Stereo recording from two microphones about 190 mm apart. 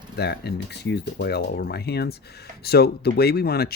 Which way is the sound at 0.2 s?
60° left (ahead or behind).